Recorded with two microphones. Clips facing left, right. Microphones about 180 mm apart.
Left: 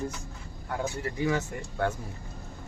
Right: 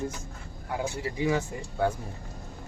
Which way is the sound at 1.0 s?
10° right (ahead or behind).